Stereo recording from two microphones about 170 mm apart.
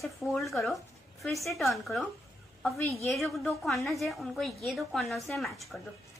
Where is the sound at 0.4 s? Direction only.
Centre (ahead or behind).